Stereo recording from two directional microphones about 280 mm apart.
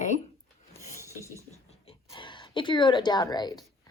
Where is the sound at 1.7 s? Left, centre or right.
Centre.